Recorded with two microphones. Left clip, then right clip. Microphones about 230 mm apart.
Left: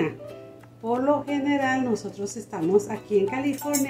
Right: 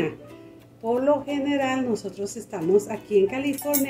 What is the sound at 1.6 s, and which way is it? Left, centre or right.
Speech, left.